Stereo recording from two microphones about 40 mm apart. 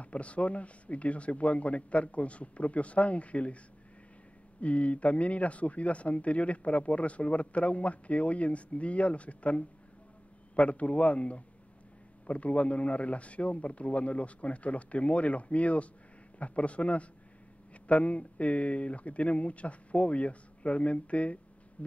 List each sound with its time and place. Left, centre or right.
0.0 s a man's voice: left
4.6 s a man's voice: left
21.8 s music: left